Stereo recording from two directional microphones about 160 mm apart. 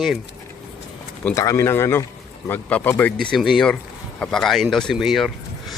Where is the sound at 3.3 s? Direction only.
Centre (ahead or behind).